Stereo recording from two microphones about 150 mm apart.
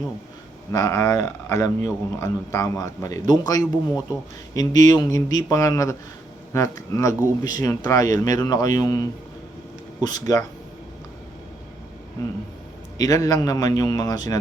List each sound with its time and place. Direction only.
0.7 s speech: 20° left (ahead or behind)
10.0 s speech: 25° left (ahead or behind)
13.0 s speech: 20° left (ahead or behind)